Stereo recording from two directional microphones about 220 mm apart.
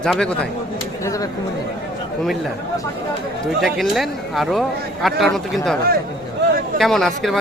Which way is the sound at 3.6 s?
Centre (ahead or behind).